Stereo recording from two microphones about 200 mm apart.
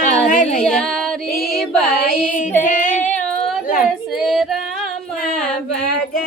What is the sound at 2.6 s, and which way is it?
Speech, 40° left (ahead or behind).